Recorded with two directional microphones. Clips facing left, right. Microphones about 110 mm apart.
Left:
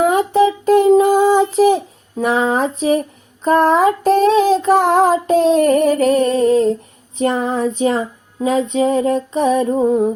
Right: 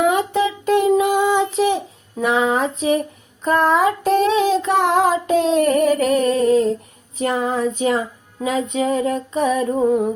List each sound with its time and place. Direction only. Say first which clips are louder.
0.1 s child singing: left 5 dB; 35° left (ahead or behind)
7.2 s female singing: left 3 dB; 35° left (ahead or behind)